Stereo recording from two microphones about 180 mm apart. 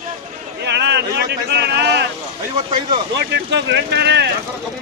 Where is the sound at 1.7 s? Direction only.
65° right (ahead or behind).